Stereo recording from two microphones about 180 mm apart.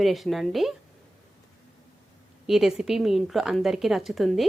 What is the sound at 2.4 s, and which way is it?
Speech, centre (ahead or behind).